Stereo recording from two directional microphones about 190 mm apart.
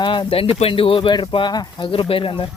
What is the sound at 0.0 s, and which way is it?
Speech, 25° left (ahead or behind).